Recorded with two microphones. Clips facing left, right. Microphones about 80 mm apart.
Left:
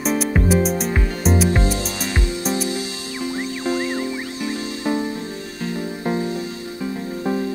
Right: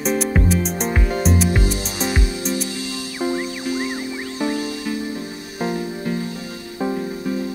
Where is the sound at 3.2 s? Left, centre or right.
Centre.